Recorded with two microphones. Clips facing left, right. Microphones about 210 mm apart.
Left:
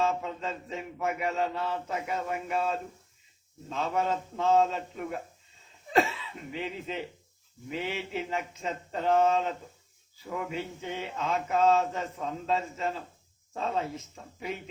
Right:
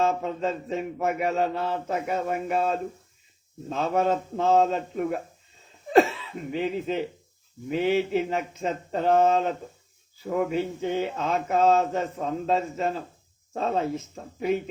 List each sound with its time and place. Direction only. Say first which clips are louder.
0.0 s mantra: right 5 dB; 45° right (ahead or behind)
5.9 s speech: right 7 dB; 55° right (ahead or behind)
7.7 s mantra: right 10 dB; 45° right (ahead or behind)